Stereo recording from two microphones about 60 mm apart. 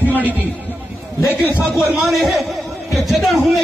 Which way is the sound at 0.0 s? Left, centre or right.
Left.